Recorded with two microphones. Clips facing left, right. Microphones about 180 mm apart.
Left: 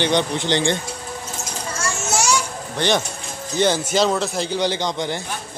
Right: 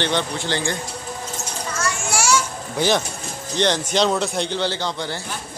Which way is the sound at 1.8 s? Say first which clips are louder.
Left 1 dB; 25° left (ahead or behind).